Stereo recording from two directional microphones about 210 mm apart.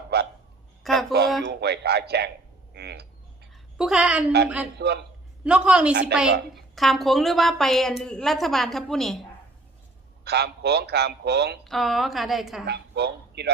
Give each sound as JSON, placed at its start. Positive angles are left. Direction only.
{"t": 0.1, "sound": "hiccup", "side_deg": -50}
{"t": 0.8, "sound": "a sound", "side_deg": 0}
{"t": 1.5, "sound": "a man's voice", "side_deg": -50}
{"t": 2.7, "sound": "a sound", "side_deg": -50}
{"t": 3.8, "sound": "a woman's voice", "side_deg": -5}
{"t": 4.8, "sound": "a man's voice", "side_deg": -50}
{"t": 5.4, "sound": "a woman's voice", "side_deg": -5}
{"t": 5.9, "sound": "a woman's voice", "side_deg": -55}
{"t": 6.5, "sound": "a woman's voice", "side_deg": 0}
{"t": 10.2, "sound": "a man's voice", "side_deg": -50}
{"t": 11.6, "sound": "a woman's voice", "side_deg": 0}
{"t": 12.6, "sound": "a man's voice", "side_deg": -50}